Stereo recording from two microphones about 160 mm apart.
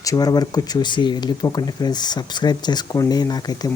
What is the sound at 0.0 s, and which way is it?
Speech, 20° left (ahead or behind).